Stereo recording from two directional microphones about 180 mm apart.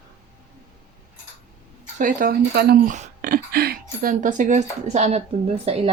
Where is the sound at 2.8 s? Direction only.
45° right (ahead or behind).